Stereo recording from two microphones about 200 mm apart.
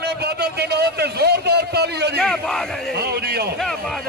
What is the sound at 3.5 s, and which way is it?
Speech, centre (ahead or behind).